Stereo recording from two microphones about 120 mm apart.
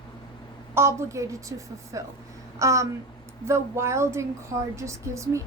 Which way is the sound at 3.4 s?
25° right (ahead or behind).